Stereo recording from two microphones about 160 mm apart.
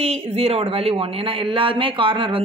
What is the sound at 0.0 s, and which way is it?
Speech, 40° right (ahead or behind).